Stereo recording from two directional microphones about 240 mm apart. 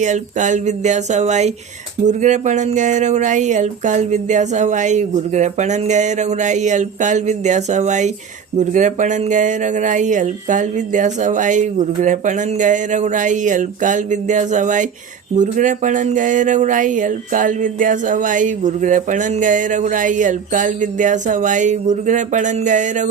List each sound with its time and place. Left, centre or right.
0.0 s speech: right